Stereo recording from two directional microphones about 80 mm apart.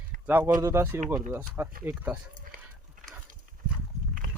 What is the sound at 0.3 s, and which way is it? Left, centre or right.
Speech, right.